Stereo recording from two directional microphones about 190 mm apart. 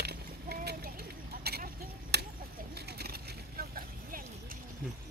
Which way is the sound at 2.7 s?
60° right (ahead or behind).